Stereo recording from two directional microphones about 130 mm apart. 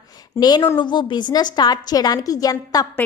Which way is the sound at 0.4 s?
30° left (ahead or behind).